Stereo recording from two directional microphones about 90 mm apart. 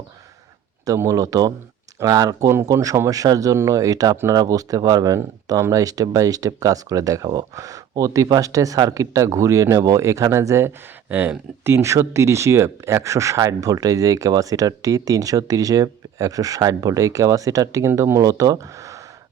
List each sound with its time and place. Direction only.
0.9 s speech: 40° right (ahead or behind)
2.7 s speech: 30° right (ahead or behind)
11.1 s speech: 20° right (ahead or behind); by 19.0 s 40° right (ahead or behind)